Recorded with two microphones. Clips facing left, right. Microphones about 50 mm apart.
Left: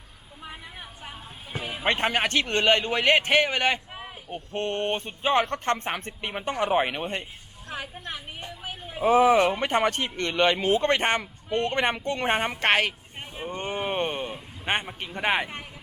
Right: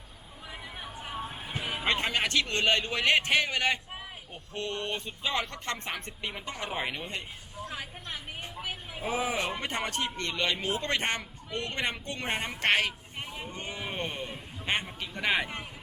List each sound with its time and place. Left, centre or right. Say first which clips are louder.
1.8 s a man's voice: left 5 dB; left